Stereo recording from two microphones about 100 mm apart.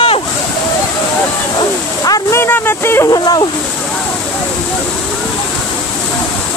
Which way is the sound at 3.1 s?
45° left (ahead or behind).